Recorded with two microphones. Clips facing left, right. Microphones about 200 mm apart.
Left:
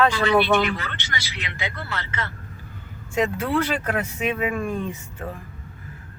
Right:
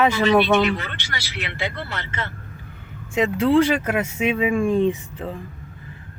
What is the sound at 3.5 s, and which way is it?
Speech, 10° right (ahead or behind).